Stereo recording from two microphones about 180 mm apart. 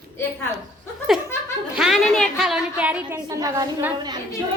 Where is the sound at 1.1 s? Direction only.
Centre (ahead or behind).